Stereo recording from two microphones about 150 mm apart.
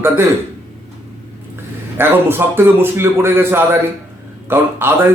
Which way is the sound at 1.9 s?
15° right (ahead or behind).